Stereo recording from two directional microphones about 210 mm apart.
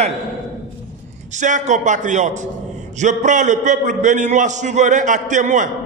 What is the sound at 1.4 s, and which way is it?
A man's voice, 35° right (ahead or behind).